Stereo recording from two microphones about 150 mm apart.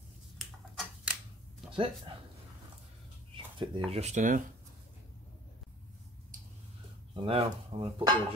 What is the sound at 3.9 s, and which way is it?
Speech, 50° right (ahead or behind).